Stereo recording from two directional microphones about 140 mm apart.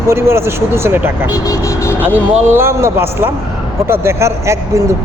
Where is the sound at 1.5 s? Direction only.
20° left (ahead or behind).